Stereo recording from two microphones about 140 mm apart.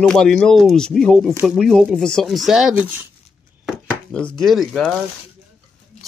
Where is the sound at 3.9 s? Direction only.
10° left (ahead or behind).